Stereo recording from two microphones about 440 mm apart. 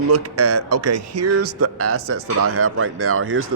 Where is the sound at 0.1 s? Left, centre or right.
Right.